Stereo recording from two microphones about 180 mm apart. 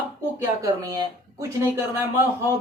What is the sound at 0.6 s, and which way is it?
Speech, 20° right (ahead or behind).